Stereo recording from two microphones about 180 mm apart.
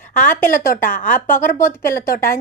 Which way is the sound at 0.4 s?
50° left (ahead or behind).